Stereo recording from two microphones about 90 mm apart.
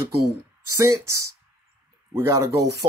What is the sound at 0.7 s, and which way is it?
Speech, 40° right (ahead or behind).